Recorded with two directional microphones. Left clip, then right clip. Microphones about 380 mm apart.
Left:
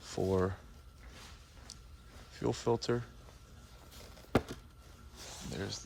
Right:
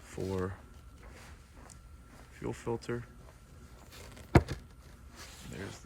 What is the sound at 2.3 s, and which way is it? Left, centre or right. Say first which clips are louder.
Speech: left 5 dB; centre.